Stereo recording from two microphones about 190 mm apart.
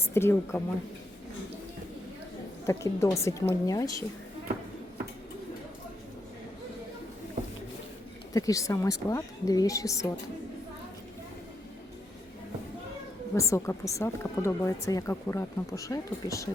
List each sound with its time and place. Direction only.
0.1 s speech: 10° left (ahead or behind)
2.6 s speech: 15° left (ahead or behind)
8.3 s speech: 20° left (ahead or behind)
13.3 s speech: 15° left (ahead or behind)